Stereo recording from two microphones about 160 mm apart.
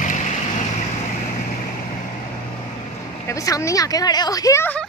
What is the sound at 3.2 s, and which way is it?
Speech, 20° left (ahead or behind).